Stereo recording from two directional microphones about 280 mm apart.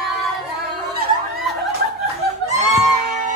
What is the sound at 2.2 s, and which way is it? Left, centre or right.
Chicken, right.